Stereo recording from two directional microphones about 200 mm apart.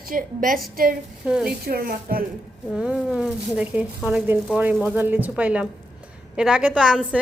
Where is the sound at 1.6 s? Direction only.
45° right (ahead or behind).